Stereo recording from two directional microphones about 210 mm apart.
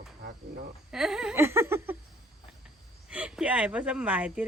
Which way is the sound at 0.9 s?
Centre (ahead or behind).